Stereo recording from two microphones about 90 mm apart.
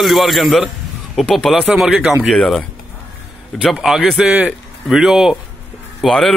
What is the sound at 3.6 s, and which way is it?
A man's voice, 5° right (ahead or behind).